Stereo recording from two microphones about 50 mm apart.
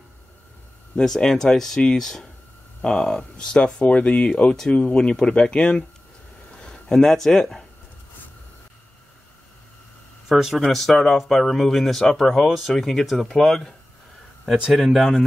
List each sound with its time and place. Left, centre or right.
0.9 s speech: centre
10.2 s speech: centre